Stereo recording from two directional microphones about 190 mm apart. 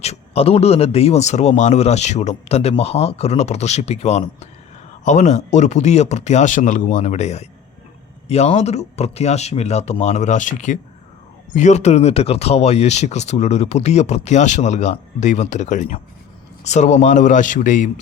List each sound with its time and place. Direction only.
0.0 s speech: 35° left (ahead or behind)